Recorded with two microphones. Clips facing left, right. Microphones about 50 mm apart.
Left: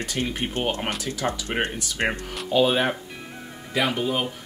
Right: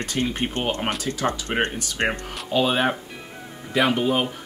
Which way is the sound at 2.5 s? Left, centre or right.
Centre.